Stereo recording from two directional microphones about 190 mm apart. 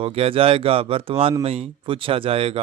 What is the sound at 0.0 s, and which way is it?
Speech, 30° right (ahead or behind).